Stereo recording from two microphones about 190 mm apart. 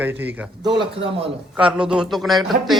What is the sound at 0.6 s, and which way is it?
Speech, 25° right (ahead or behind).